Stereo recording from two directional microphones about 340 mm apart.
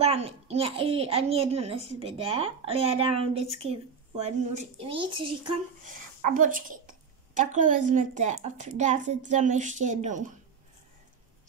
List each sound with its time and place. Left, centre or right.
0.0 s a woman's voice: centre